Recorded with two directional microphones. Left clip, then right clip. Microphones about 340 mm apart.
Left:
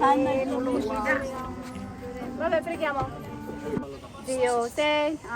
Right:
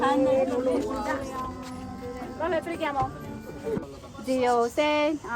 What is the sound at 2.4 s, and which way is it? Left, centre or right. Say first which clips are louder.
Speech: left 2 dB; right.